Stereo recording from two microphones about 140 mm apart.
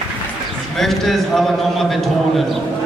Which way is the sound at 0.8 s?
Centre (ahead or behind).